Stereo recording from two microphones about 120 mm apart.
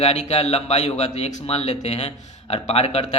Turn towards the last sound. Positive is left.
turn(degrees=60)  # may be behind; listen again after turning